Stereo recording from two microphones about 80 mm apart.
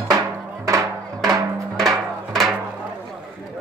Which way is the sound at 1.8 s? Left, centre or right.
Centre.